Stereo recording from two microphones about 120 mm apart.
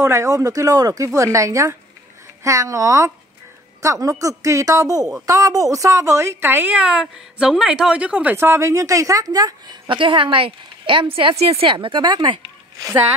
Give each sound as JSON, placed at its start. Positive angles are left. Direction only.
{"t": 0.0, "sound": "a woman's voice", "side_deg": -25}
{"t": 8.4, "sound": "a woman's voice", "side_deg": -25}
{"t": 9.8, "sound": "a woman's voice", "side_deg": -45}